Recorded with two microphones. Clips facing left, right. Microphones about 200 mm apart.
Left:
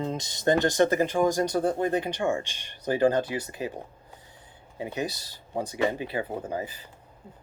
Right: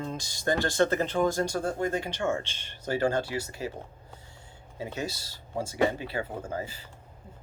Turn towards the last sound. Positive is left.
turn(degrees=15)  # may be behind; listen again after turning